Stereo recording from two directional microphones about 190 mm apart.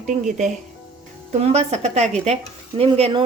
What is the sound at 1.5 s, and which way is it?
Speech, 35° right (ahead or behind).